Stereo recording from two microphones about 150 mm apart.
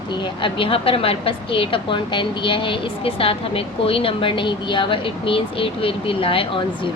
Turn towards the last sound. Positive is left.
turn(degrees=35)  # may be behind; listen again after turning